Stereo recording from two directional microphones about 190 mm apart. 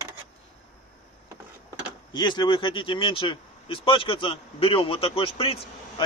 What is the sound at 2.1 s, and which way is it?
Speech, 25° left (ahead or behind).